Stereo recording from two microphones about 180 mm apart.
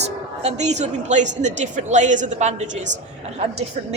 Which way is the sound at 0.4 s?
40° right (ahead or behind).